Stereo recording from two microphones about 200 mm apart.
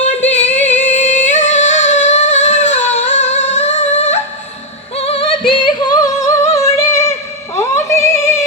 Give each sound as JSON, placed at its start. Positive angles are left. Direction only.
{"t": 0.3, "sound": "female singing", "side_deg": 35}
{"t": 0.7, "sound": "singing", "side_deg": 35}
{"t": 4.9, "sound": "music", "side_deg": 30}
{"t": 5.5, "sound": "singing", "side_deg": 25}
{"t": 7.5, "sound": "music", "side_deg": 15}